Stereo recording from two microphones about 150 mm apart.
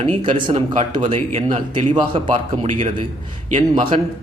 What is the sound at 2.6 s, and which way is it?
Speech, 50° right (ahead or behind).